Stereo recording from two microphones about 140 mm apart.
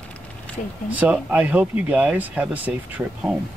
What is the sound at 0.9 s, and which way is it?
Speech, 10° right (ahead or behind).